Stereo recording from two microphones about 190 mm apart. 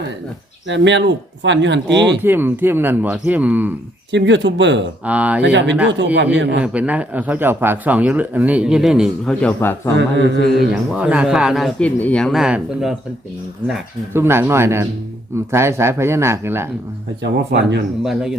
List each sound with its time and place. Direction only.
0.7 s speech: 70° right (ahead or behind)
2.2 s a man's voice: 10° right (ahead or behind)
4.1 s speech: 70° right (ahead or behind)
5.0 s a man's voice: 5° right (ahead or behind)
5.4 s speech: 70° right (ahead or behind)
6.6 s a man's voice: 5° right (ahead or behind); by 9.9 s 10° left (ahead or behind)
10.0 s speech: 65° right (ahead or behind)
10.7 s speech: 5° right (ahead or behind)
14.1 s a man's voice: 10° right (ahead or behind)
17.2 s speech: 65° right (ahead or behind)
18.0 s speech: 5° right (ahead or behind)